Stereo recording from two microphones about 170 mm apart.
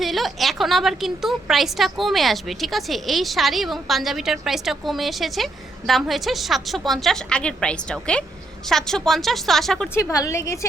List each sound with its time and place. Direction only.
0.0 s a woman's voice: centre (ahead or behind)
9.9 s a woman's voice: 20° left (ahead or behind)